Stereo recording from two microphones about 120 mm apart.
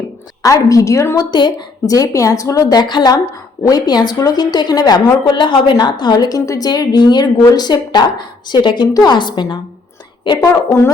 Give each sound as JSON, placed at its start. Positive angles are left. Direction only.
{"t": 0.4, "sound": "a woman's voice", "side_deg": 30}
{"t": 1.3, "sound": "a woman's voice", "side_deg": 35}
{"t": 10.5, "sound": "a woman's voice", "side_deg": 20}